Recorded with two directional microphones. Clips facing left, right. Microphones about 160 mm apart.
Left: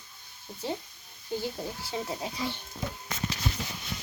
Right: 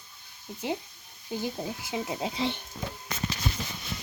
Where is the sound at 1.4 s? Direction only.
15° right (ahead or behind).